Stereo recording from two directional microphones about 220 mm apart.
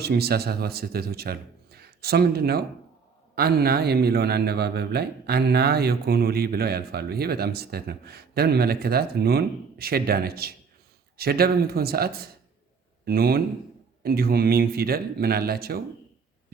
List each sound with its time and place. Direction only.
0.0 s speech: 45° right (ahead or behind)